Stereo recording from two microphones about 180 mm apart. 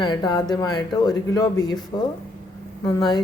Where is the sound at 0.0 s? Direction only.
25° left (ahead or behind).